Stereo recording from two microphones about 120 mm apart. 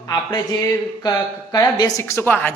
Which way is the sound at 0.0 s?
35° left (ahead or behind).